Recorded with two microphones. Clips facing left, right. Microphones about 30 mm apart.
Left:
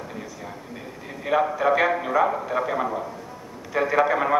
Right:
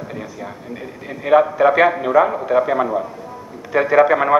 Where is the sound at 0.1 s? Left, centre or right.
Right.